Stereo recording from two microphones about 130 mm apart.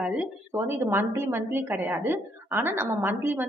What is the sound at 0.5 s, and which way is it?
A woman's voice, 20° right (ahead or behind).